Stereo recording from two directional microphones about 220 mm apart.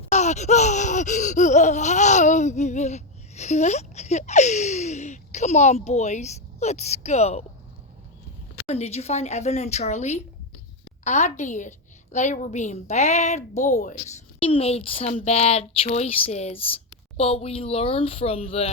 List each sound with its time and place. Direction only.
0.1 s gasp: 30° left (ahead or behind)
8.5 s speech: 30° left (ahead or behind)
11.0 s gasp: 30° left (ahead or behind)
14.3 s speech: 25° left (ahead or behind)